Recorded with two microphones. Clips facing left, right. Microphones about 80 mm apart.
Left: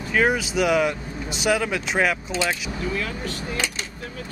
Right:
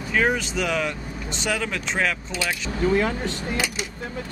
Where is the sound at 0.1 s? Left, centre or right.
Centre.